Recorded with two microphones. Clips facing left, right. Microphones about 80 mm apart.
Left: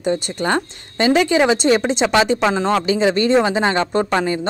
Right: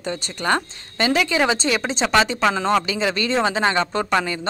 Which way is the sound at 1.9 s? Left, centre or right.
Centre.